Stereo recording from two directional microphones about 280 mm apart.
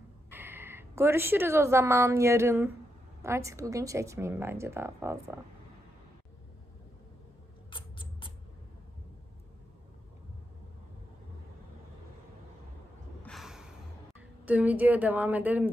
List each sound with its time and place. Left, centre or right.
0.3 s a woman's voice: centre
7.7 s rodents: centre
13.2 s a sound: centre
14.4 s a woman's voice: centre